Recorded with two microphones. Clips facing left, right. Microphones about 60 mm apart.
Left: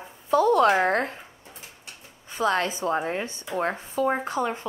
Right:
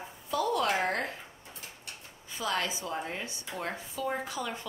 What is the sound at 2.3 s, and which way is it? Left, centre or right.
Speech, left.